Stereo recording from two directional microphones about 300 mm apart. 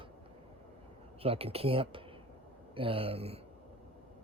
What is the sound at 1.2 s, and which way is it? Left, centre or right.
Speech, centre.